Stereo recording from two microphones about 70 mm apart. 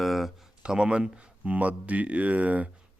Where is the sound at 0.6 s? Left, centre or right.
Centre.